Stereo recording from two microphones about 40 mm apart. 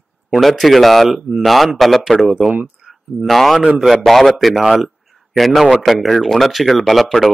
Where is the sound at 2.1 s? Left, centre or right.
Left.